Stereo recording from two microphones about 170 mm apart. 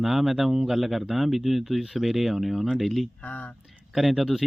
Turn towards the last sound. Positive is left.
turn(degrees=0)  # may be behind; listen again after turning